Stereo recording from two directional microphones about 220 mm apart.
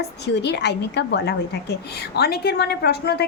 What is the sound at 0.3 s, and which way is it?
A woman's voice, 50° left (ahead or behind).